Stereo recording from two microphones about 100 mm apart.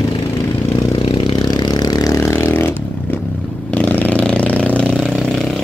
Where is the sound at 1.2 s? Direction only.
45° left (ahead or behind).